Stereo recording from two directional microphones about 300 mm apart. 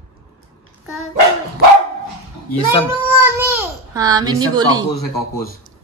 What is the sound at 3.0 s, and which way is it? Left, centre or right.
A woman's voice, centre.